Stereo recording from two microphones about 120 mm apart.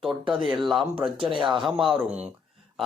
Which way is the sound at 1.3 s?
40° right (ahead or behind).